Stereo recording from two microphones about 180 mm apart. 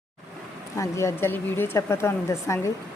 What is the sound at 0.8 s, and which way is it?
Speech, 15° left (ahead or behind).